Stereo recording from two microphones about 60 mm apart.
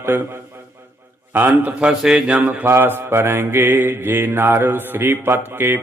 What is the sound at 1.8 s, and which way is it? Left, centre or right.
Speech, centre.